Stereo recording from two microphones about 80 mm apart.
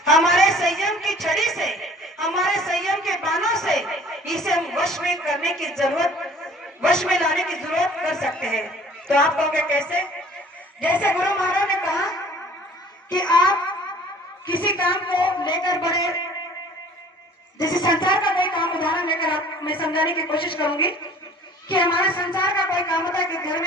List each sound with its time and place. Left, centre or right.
0.0 s a sound: centre
9.0 s a woman's voice: centre
10.8 s a man's voice: left
13.1 s a child's voice: left
14.4 s a woman's voice: left
17.9 s a woman's voice: left
21.7 s a sound: left